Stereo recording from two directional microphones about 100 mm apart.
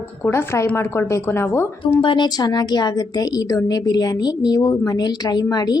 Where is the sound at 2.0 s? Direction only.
55° left (ahead or behind).